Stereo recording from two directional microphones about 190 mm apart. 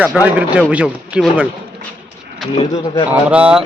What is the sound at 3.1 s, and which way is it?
Speech, 5° right (ahead or behind).